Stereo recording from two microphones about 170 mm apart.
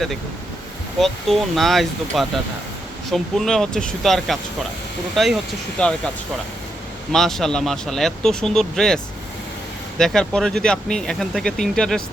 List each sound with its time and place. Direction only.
0.9 s speech: centre (ahead or behind)
7.1 s speech: centre (ahead or behind)
10.0 s speech: centre (ahead or behind)